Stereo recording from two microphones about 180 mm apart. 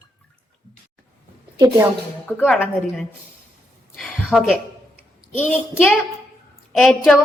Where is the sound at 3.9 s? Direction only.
Centre (ahead or behind).